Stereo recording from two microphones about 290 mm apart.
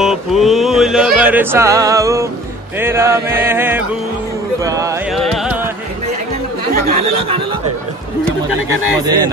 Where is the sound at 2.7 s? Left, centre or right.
Centre.